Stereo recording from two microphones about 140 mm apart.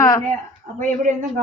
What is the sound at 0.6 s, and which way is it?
Speech, 55° right (ahead or behind).